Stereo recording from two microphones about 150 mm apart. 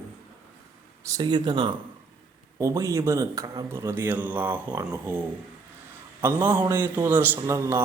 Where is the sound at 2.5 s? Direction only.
20° right (ahead or behind).